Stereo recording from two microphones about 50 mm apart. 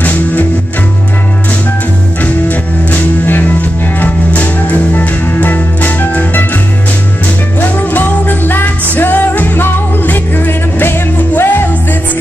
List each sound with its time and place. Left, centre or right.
0.0 s music: left
2.4 s music: left
7.7 s music: left